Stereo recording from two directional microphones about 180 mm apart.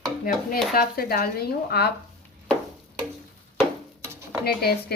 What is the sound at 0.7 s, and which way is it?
Speech, 55° left (ahead or behind).